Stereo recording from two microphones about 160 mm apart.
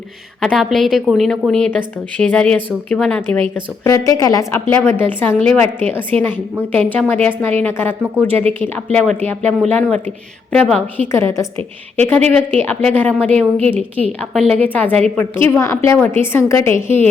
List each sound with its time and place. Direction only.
0.4 s a woman's voice: centre (ahead or behind)
3.8 s a woman's voice: 20° left (ahead or behind)
8.3 s speech: 40° right (ahead or behind)
8.6 s a woman's voice: 10° left (ahead or behind)